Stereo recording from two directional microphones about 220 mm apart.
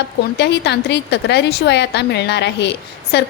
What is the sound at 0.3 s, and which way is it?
A woman's voice, 50° left (ahead or behind).